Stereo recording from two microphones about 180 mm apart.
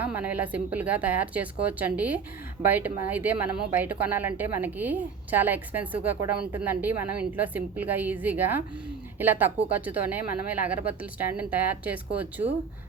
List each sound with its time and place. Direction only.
0.0 s a woman's voice: 10° right (ahead or behind)